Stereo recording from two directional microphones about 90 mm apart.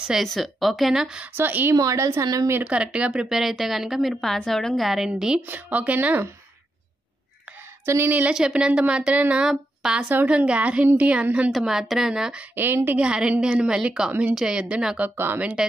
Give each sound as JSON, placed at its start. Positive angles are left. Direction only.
{"t": 0.0, "sound": "a woman's voice", "side_deg": -5}
{"t": 1.3, "sound": "a woman's voice", "side_deg": -20}
{"t": 1.8, "sound": "a woman's voice", "side_deg": -35}
{"t": 2.5, "sound": "a woman's voice", "side_deg": -15}
{"t": 5.5, "sound": "a woman's voice", "side_deg": -15}
{"t": 7.8, "sound": "speech", "side_deg": -30}
{"t": 8.1, "sound": "a woman's voice", "side_deg": -20}
{"t": 8.4, "sound": "a woman's voice", "side_deg": -10}
{"t": 11.5, "sound": "a woman's voice", "side_deg": -5}
{"t": 12.5, "sound": "a woman's voice", "side_deg": -25}
{"t": 13.0, "sound": "a woman's voice", "side_deg": -10}
{"t": 15.0, "sound": "a woman's voice", "side_deg": -20}